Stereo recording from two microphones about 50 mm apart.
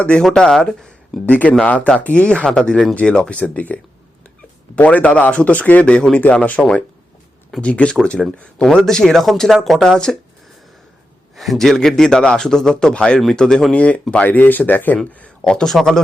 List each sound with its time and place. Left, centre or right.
0.2 s speech: centre
1.3 s speech: left
2.9 s speech: left
5.8 s speech: centre
6.1 s speech: left
8.2 s speech: centre
11.3 s a man's voice: centre
13.7 s speech: left
14.3 s speech: left
15.4 s a man's voice: centre